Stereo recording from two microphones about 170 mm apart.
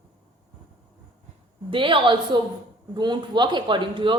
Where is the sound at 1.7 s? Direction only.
30° right (ahead or behind).